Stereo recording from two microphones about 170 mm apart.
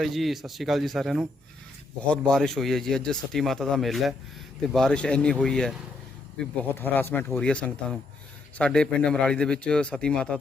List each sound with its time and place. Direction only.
0.0 s a man's voice: centre (ahead or behind)
6.7 s a man's voice: 10° left (ahead or behind)